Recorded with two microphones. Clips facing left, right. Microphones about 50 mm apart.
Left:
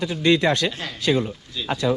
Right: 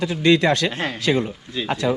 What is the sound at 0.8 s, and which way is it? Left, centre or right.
Speech, right.